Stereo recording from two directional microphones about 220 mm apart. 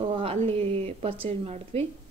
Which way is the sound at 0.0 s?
25° right (ahead or behind).